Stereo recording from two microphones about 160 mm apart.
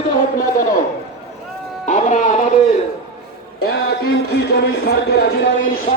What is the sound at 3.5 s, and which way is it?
Speech, 85° left.